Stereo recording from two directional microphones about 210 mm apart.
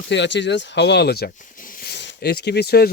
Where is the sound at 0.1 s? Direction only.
55° left (ahead or behind).